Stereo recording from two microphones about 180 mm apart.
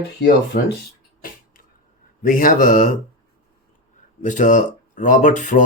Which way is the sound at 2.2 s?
50° left (ahead or behind).